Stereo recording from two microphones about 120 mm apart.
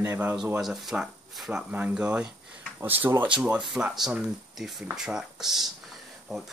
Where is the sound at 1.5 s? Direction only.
15° right (ahead or behind).